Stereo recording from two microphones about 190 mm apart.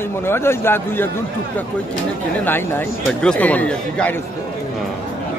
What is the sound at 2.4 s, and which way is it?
Speech, 10° left (ahead or behind).